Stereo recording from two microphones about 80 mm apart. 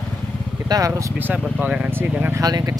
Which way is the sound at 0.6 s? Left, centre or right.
Right.